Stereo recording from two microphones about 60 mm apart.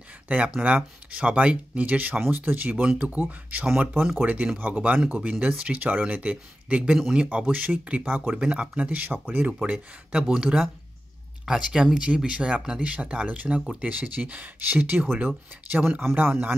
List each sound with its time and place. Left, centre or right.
0.6 s speech: centre
3.6 s speech: centre; by 16.5 s right